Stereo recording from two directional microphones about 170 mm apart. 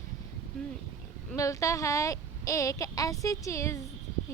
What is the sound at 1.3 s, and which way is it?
Speech, 20° left (ahead or behind).